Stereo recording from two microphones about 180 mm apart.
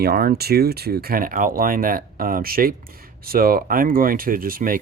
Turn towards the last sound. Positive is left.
turn(degrees=-50)  # may be behind; listen again after turning